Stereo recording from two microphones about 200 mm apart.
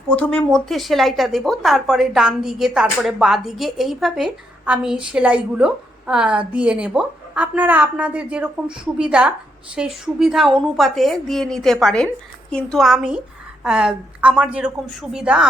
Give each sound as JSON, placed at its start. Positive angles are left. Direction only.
{"t": 0.1, "sound": "a woman's voice", "side_deg": 5}